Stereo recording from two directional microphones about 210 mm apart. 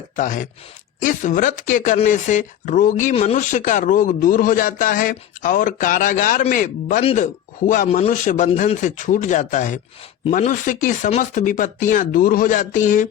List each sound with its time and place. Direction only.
0.2 s speech: 40° left (ahead or behind)
7.0 s speech: 30° left (ahead or behind)